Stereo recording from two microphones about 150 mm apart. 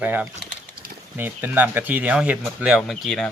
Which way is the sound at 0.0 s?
10° right (ahead or behind).